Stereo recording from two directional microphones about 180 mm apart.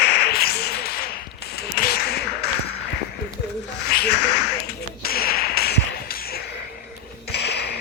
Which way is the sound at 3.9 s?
65° left (ahead or behind).